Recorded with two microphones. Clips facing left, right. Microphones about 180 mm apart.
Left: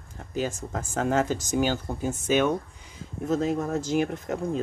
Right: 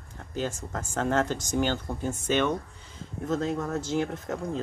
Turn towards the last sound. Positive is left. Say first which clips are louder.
# left 3 dB
turn(degrees=15)  # may be behind; listen again after turning